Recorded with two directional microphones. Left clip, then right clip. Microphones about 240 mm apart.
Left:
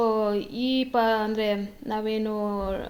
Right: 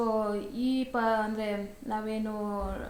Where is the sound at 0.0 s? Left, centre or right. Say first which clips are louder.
Left 6 dB; left.